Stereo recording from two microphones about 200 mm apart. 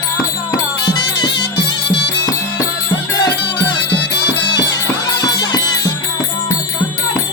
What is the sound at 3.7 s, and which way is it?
Music, 20° left (ahead or behind).